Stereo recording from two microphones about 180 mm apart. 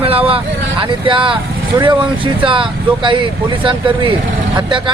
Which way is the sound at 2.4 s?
30° right (ahead or behind).